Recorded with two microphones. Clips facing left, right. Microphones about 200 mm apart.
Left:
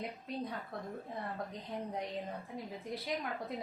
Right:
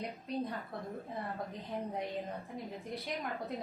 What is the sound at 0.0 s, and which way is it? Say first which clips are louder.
A woman's voice: right 2 dB; centre (ahead or behind).